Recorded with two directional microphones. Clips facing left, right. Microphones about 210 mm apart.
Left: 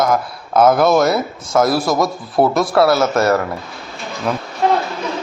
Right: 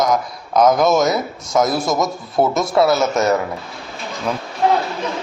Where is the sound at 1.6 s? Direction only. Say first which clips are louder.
Left 2 dB; 20° right (ahead or behind).